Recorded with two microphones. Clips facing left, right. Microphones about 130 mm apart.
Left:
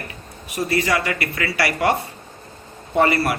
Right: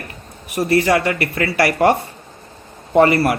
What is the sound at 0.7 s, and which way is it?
A man's voice, 55° right (ahead or behind).